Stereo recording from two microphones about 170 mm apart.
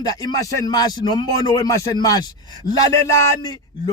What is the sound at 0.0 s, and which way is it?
Speech, 20° left (ahead or behind).